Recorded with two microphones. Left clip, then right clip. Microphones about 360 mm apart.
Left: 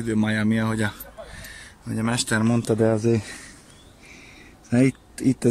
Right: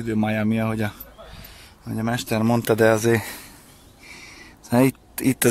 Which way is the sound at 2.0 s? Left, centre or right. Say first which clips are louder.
Even; centre.